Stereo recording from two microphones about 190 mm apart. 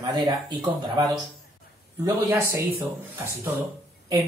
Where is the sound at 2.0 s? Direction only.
10° right (ahead or behind).